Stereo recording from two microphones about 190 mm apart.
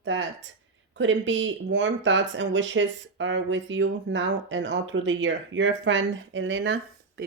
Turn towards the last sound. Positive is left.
turn(degrees=-75)  # may be behind; listen again after turning